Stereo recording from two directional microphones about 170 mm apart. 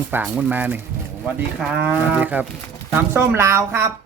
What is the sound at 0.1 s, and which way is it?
Speech, 10° right (ahead or behind).